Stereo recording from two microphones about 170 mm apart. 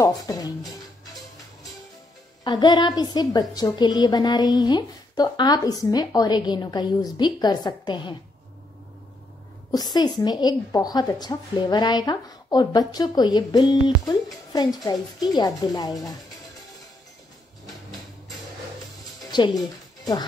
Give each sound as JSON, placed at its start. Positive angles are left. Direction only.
{"t": 0.0, "sound": "speech", "side_deg": 20}
{"t": 2.4, "sound": "a woman's voice", "side_deg": 25}
{"t": 9.7, "sound": "a woman's voice", "side_deg": 25}
{"t": 19.3, "sound": "speech", "side_deg": 25}